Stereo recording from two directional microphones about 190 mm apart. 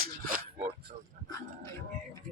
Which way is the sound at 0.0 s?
45° right (ahead or behind).